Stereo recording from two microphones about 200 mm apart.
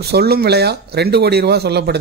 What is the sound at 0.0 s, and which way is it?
A man's voice, 55° right (ahead or behind).